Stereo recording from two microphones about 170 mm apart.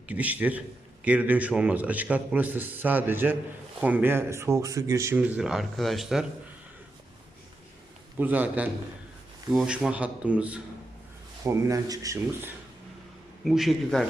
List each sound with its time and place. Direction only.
0.1 s speech: 10° right (ahead or behind)
8.2 s speech: 10° right (ahead or behind)
11.4 s speech: 20° right (ahead or behind)
13.4 s speech: centre (ahead or behind)